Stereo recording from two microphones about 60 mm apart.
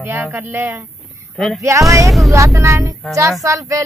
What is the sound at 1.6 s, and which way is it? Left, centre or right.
Speech, right.